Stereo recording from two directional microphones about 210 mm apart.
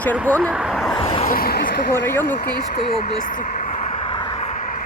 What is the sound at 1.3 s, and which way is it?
Speech, 45° left (ahead or behind).